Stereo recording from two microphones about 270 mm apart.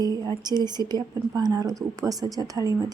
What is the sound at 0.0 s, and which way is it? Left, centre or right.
A woman's voice, centre.